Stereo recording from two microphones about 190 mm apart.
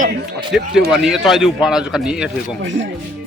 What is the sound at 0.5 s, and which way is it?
Speech, 5° right (ahead or behind).